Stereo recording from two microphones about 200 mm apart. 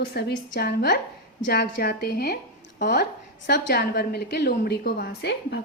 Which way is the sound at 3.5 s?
55° left (ahead or behind).